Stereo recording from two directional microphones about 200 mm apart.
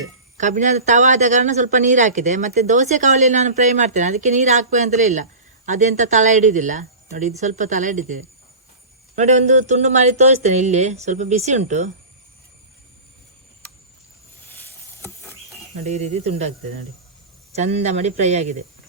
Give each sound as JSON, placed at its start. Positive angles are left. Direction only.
{"t": 0.3, "sound": "a man's voice", "side_deg": -40}
{"t": 14.4, "sound": "rodents", "side_deg": 10}
{"t": 15.8, "sound": "a man's voice", "side_deg": -35}